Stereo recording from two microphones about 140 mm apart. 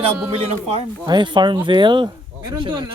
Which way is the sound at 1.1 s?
35° right (ahead or behind).